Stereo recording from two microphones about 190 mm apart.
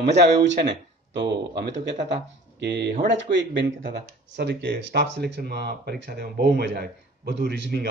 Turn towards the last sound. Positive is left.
turn(degrees=-60)  # may be behind; listen again after turning